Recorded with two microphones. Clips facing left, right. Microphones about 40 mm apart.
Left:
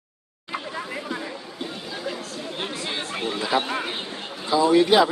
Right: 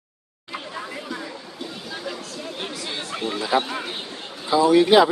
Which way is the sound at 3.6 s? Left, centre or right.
Centre.